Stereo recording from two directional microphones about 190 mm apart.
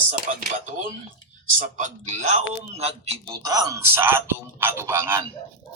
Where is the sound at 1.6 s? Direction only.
40° right (ahead or behind).